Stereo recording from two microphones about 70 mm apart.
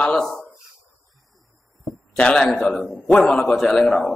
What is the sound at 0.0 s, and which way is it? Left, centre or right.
Speech, centre.